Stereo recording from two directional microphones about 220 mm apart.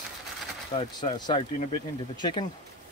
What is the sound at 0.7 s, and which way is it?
Speech, 20° left (ahead or behind).